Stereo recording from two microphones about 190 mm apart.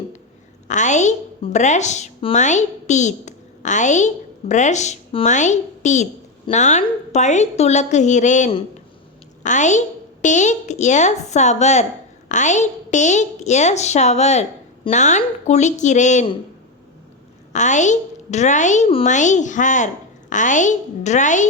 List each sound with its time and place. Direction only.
0.7 s a woman's voice: 40° left (ahead or behind)
17.5 s speech: 40° left (ahead or behind)